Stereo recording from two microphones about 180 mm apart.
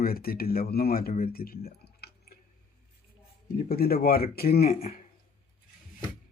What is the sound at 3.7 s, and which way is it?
Speech, 55° left (ahead or behind).